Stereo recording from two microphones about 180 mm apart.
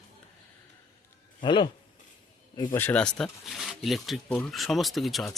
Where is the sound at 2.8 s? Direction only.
5° left (ahead or behind).